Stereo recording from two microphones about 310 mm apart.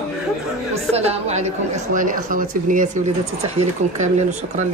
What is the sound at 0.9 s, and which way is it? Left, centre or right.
Speech, centre.